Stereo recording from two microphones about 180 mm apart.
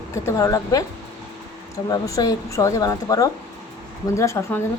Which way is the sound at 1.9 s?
20° left (ahead or behind).